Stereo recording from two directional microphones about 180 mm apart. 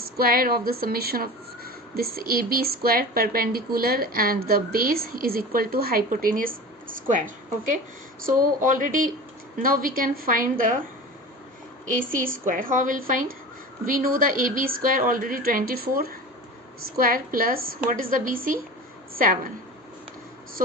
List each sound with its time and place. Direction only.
0.0 s a woman's voice: 55° right (ahead or behind)
11.9 s a woman's voice: 50° right (ahead or behind)